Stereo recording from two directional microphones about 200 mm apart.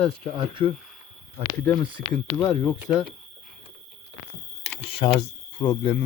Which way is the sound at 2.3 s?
10° left (ahead or behind).